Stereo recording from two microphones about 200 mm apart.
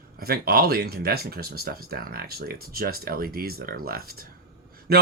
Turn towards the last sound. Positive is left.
turn(degrees=-50)  # may be behind; listen again after turning